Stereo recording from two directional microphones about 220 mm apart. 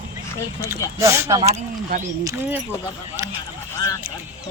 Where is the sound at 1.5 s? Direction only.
35° right (ahead or behind).